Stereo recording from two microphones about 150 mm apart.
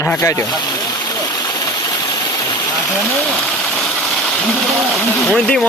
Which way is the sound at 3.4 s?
10° left (ahead or behind).